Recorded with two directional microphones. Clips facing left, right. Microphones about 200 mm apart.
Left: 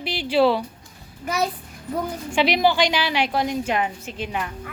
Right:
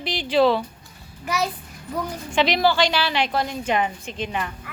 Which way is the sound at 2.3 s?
10° left (ahead or behind).